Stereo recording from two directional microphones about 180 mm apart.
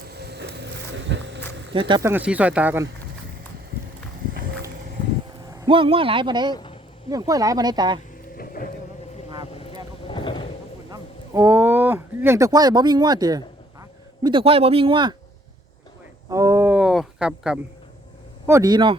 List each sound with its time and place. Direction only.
0.1 s a sound: 65° right (ahead or behind); by 1.5 s 85° right
1.7 s speech: 30° right (ahead or behind)
2.0 s speech: 10° right (ahead or behind)
5.5 s speech: 25° right (ahead or behind)
8.4 s vehicle: 50° left (ahead or behind)
10.1 s a sound: 25° left (ahead or behind)
10.9 s speech: 15° right (ahead or behind)
16.3 s a sound: 15° right (ahead or behind)
18.4 s speech: 20° right (ahead or behind)